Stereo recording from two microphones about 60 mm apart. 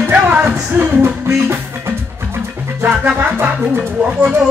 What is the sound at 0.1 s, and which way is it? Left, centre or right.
Music, right.